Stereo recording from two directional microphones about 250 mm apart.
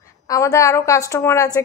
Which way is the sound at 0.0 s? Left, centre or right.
Centre.